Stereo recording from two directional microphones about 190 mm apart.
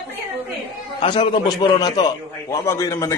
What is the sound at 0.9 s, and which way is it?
A man's voice, 25° left (ahead or behind).